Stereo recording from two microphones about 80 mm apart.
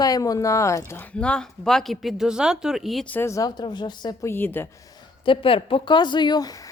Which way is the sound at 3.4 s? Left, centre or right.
Left.